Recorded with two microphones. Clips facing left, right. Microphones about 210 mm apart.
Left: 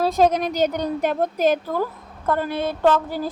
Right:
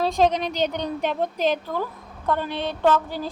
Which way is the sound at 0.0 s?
5° left (ahead or behind).